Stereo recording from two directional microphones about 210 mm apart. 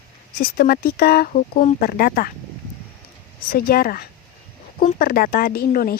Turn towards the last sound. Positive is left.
turn(degrees=45)  # may be behind; listen again after turning